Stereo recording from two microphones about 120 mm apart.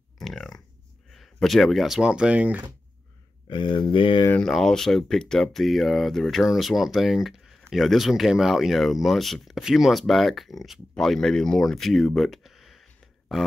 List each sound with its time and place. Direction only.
0.2 s a sound: 5° left (ahead or behind)
1.1 s speech: centre (ahead or behind)
3.4 s speech: 45° left (ahead or behind)
4.4 s speech: 5° left (ahead or behind)